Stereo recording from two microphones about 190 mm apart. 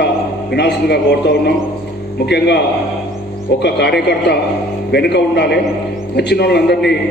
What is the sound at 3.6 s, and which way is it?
A man's voice, 60° left (ahead or behind).